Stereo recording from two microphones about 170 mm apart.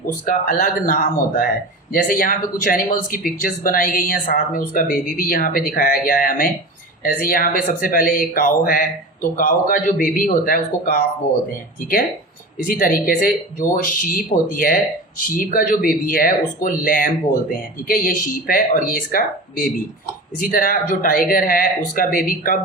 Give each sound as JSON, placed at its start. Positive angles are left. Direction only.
{"t": 0.3, "sound": "speech", "side_deg": 60}
{"t": 12.6, "sound": "speech", "side_deg": 55}